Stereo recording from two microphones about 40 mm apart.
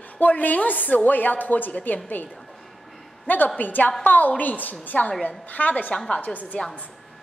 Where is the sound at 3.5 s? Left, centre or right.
Left.